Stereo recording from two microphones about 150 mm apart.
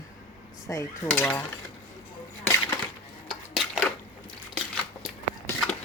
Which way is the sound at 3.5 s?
Centre (ahead or behind).